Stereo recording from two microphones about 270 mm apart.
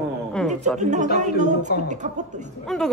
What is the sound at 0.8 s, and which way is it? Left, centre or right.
Speech, right.